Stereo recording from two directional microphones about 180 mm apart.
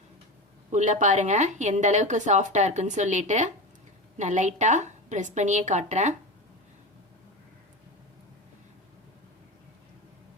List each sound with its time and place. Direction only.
0.7 s a woman's voice: 40° right (ahead or behind)